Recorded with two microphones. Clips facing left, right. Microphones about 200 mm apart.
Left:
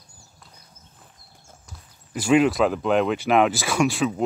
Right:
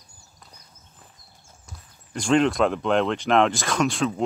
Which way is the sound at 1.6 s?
5° left (ahead or behind).